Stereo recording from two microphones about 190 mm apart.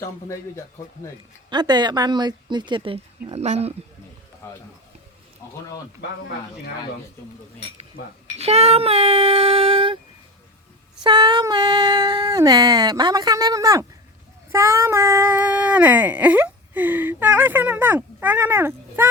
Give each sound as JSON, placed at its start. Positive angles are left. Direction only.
{"t": 0.0, "sound": "a man's voice", "side_deg": 15}
{"t": 1.5, "sound": "a sound", "side_deg": -25}
{"t": 4.4, "sound": "a man's voice", "side_deg": 15}
{"t": 8.4, "sound": "speech", "side_deg": -35}
{"t": 11.0, "sound": "a sound", "side_deg": -20}
{"t": 14.5, "sound": "child singing", "side_deg": -15}